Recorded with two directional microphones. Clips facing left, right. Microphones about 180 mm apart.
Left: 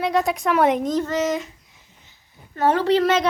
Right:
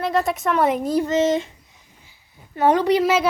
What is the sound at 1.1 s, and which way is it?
Speech, 25° right (ahead or behind).